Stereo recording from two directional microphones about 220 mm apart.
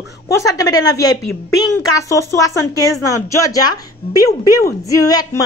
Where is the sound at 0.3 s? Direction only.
15° left (ahead or behind).